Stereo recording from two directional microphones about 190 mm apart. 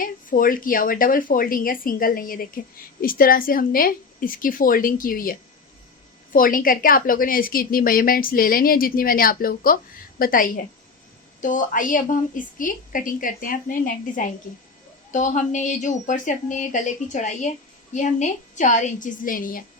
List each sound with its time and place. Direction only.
0.0 s a woman's voice: 45° left (ahead or behind)